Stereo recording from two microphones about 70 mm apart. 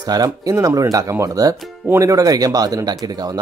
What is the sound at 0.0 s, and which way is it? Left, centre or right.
Speech, right.